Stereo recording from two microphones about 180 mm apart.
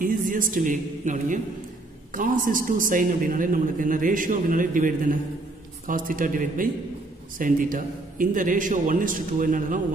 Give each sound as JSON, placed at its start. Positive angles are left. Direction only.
{"t": 0.0, "sound": "a man's voice", "side_deg": -45}